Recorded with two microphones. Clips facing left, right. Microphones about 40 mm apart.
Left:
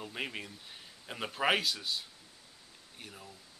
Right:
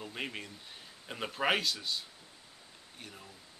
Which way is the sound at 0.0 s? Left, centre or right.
Centre.